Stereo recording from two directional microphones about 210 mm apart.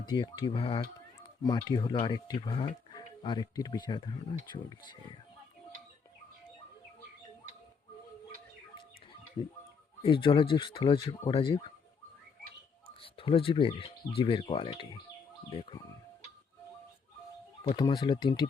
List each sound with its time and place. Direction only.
0.1 s speech: 20° left (ahead or behind)
10.0 s speech: 25° left (ahead or behind)
13.0 s speech: 25° left (ahead or behind)
17.7 s speech: 20° left (ahead or behind)